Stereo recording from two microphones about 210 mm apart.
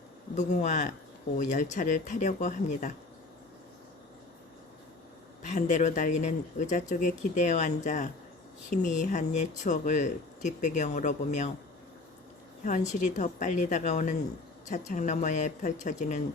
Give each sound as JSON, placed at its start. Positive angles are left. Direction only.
{"t": 0.3, "sound": "speech", "side_deg": 35}
{"t": 5.5, "sound": "speech", "side_deg": 35}
{"t": 12.9, "sound": "speech", "side_deg": 35}